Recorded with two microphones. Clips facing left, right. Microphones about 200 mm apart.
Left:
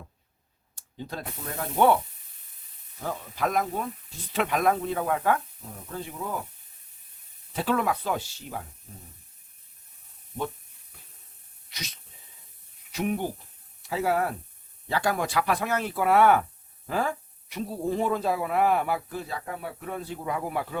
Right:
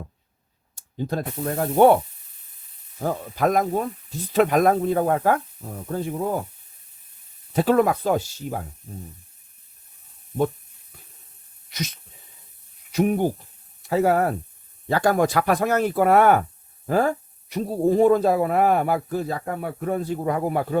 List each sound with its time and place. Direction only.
0.8 s speech: 45° right (ahead or behind)
3.0 s speech: 45° right (ahead or behind)
7.5 s speech: 45° right (ahead or behind)
11.7 s speech: 45° right (ahead or behind)